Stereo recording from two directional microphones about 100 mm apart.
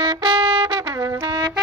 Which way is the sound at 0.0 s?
55° right (ahead or behind).